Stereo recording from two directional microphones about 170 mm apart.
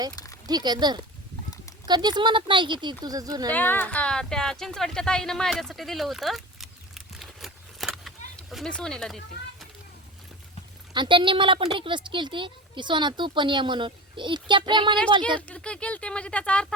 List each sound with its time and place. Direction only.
0.4 s a woman's voice: 25° right (ahead or behind)
3.5 s speech: 10° left (ahead or behind)
10.9 s a woman's voice: 25° right (ahead or behind)
15.4 s speech: 5° left (ahead or behind)